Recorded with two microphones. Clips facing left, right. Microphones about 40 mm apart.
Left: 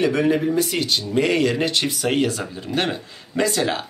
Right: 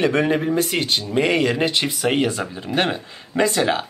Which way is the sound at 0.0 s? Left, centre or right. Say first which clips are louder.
Even; right.